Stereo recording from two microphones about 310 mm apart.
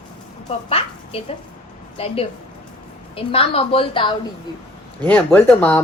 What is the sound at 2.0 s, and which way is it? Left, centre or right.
Speech, centre.